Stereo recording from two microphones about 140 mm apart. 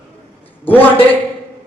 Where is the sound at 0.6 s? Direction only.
15° left (ahead or behind).